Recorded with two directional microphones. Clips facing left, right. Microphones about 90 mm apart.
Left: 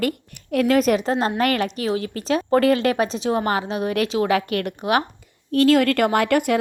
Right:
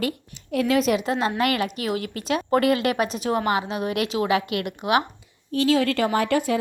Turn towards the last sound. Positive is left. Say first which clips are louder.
# left 3 dB
turn(degrees=65)  # may be behind; listen again after turning